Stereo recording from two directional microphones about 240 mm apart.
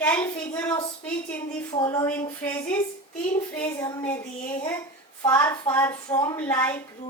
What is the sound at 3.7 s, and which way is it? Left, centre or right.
Speech, centre.